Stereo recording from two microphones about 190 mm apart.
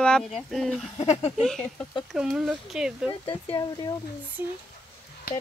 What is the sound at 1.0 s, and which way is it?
Speech, 35° left (ahead or behind).